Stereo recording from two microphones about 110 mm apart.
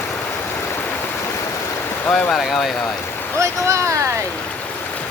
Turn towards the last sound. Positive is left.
turn(degrees=-30)  # may be behind; listen again after turning